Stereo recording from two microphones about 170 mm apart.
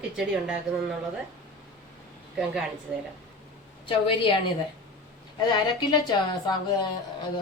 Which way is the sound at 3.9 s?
30° left (ahead or behind).